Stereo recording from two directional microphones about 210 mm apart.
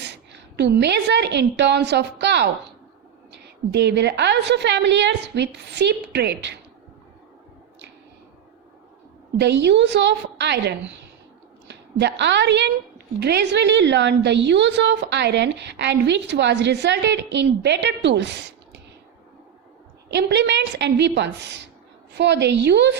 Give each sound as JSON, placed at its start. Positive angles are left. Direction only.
{"t": 0.0, "sound": "a woman's voice", "side_deg": -55}
{"t": 3.7, "sound": "a woman's voice", "side_deg": -55}
{"t": 9.4, "sound": "a woman's voice", "side_deg": -55}
{"t": 20.1, "sound": "a woman's voice", "side_deg": -55}